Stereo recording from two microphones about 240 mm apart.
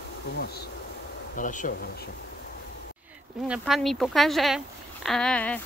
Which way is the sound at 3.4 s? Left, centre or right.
Centre.